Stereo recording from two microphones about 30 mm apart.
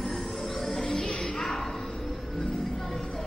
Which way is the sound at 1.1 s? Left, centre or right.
Left.